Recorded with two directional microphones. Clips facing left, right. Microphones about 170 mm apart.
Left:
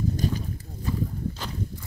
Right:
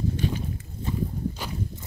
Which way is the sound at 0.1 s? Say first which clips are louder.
Even; 40° left (ahead or behind).